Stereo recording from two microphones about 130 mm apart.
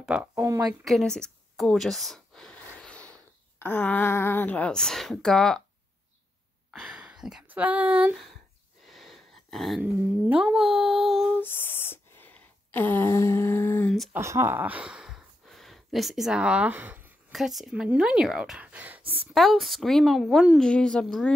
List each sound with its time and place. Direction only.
0.0 s speech: 5° right (ahead or behind)
0.3 s speech: 25° right (ahead or behind)
0.8 s speech: 5° left (ahead or behind)
6.7 s speech: centre (ahead or behind)
8.8 s a sound: centre (ahead or behind)
9.8 s a woman's voice: 10° right (ahead or behind)
11.3 s speech: 15° left (ahead or behind)
14.1 s speech: 20° right (ahead or behind)
17.3 s speech: centre (ahead or behind)
19.3 s a woman's voice: centre (ahead or behind)